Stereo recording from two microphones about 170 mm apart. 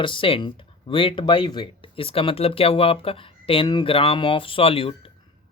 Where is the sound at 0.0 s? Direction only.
30° left (ahead or behind).